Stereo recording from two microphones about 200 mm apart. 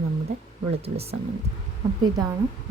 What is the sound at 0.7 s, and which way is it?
Speech, 30° right (ahead or behind).